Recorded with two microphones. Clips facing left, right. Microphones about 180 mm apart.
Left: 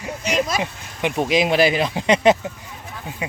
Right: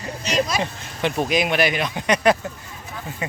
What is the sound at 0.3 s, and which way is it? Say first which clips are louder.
Speech: even; 50° left (ahead or behind).